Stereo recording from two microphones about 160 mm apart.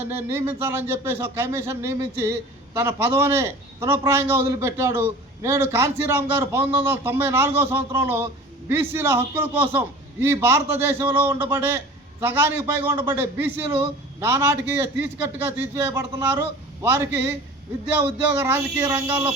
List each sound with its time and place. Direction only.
0.1 s a man's voice: 15° right (ahead or behind)